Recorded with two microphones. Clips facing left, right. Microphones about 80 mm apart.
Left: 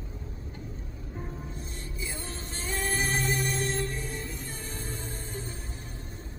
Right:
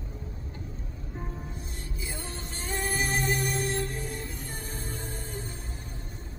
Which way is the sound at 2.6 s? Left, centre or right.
Right.